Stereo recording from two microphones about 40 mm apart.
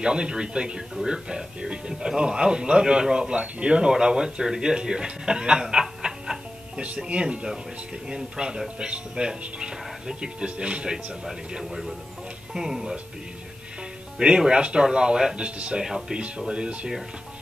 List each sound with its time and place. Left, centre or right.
0.0 s speech: right
12.5 s speech: centre
14.1 s speech: centre
15.8 s speech: centre
16.2 s speech: right